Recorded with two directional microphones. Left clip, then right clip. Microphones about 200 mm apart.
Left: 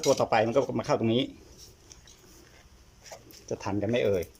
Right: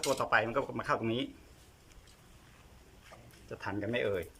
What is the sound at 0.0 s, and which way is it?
Speech, 20° left (ahead or behind).